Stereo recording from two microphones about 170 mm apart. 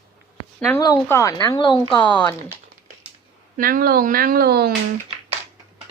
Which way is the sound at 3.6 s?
55° right (ahead or behind).